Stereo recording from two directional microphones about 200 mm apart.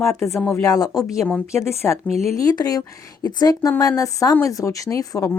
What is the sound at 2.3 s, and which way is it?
A woman's voice, 20° left (ahead or behind).